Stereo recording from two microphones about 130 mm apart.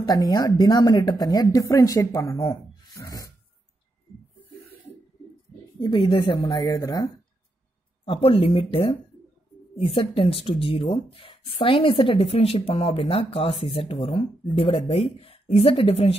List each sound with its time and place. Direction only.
0.0 s a woman's voice: 30° left (ahead or behind)
2.9 s filing: 25° left (ahead or behind)
5.8 s a woman's voice: 35° left (ahead or behind)
8.0 s speech: 45° left (ahead or behind)